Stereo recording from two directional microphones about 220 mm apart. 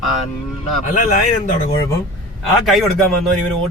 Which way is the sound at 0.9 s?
40° left (ahead or behind).